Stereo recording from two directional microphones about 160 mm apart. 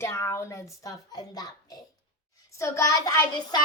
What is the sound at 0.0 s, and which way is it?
Child singing, 15° left (ahead or behind).